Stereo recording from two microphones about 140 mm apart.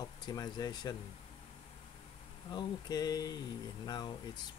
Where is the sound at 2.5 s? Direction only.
30° left (ahead or behind).